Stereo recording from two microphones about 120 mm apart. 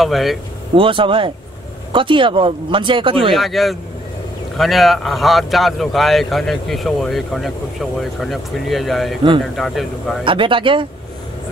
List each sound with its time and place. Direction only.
0.0 s speech: centre (ahead or behind)
0.7 s speech: 45° right (ahead or behind)
3.3 s speech: centre (ahead or behind)
10.2 s speech: 45° right (ahead or behind)